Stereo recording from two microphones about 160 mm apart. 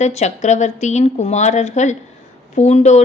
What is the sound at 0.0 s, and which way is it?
A woman's voice, 45° left (ahead or behind).